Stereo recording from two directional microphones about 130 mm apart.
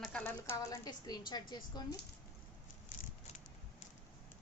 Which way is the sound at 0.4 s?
25° left (ahead or behind).